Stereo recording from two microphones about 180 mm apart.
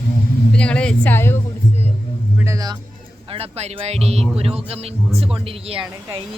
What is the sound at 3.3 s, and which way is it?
Speech, 35° right (ahead or behind).